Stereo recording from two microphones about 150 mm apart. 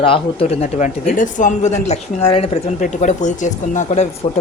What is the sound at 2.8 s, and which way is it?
Speech, 55° left (ahead or behind).